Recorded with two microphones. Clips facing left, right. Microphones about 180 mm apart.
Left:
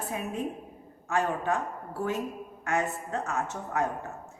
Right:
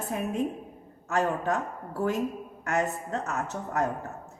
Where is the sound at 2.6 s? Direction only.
40° right (ahead or behind).